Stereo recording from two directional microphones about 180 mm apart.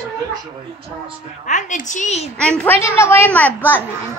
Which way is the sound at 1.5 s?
45° left (ahead or behind).